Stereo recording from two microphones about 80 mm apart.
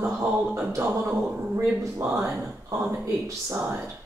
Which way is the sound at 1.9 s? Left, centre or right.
Right.